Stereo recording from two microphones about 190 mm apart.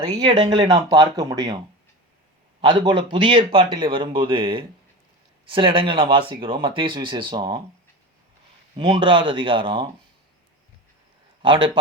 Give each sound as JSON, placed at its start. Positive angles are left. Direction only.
{"t": 0.0, "sound": "speech", "side_deg": -20}
{"t": 2.6, "sound": "speech", "side_deg": -25}
{"t": 8.7, "sound": "speech", "side_deg": -25}
{"t": 11.4, "sound": "speech", "side_deg": -25}